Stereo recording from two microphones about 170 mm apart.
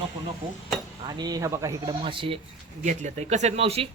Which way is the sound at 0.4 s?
25° right (ahead or behind).